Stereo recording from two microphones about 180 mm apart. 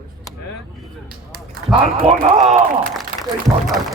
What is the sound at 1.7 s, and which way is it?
Speech, 30° right (ahead or behind).